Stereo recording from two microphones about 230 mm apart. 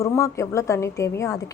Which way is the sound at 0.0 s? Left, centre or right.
Centre.